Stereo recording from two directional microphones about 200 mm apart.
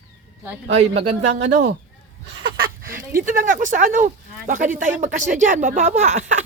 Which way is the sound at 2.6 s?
45° right (ahead or behind).